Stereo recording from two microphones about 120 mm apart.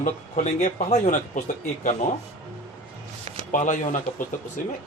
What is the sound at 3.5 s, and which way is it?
Speech, 90° left.